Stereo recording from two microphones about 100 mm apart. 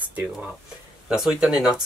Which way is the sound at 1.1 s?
5° right (ahead or behind).